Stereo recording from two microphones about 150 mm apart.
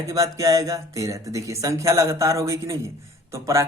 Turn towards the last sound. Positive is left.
turn(degrees=-20)  # may be behind; listen again after turning